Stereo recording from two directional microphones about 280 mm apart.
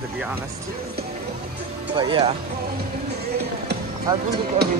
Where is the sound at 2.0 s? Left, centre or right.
Centre.